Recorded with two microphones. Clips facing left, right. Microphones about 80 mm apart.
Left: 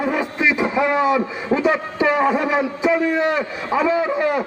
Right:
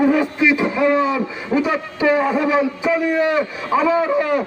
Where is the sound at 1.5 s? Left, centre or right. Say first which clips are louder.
Right 1 dB; left.